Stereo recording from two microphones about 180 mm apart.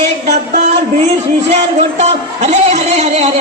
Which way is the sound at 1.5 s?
35° right (ahead or behind).